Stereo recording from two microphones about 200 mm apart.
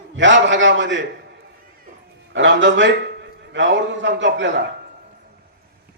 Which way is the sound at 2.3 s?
65° right (ahead or behind).